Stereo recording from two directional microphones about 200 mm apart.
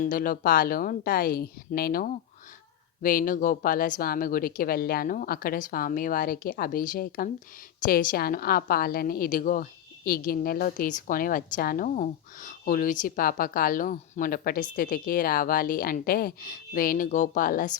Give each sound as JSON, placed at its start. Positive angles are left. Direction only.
{"t": 0.0, "sound": "a woman's voice", "side_deg": 45}